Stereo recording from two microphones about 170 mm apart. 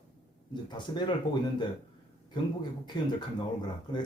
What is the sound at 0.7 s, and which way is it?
Speech, 25° left (ahead or behind).